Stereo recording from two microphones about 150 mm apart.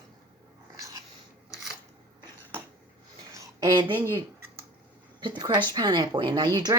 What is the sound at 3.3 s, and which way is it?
Speech, 25° right (ahead or behind).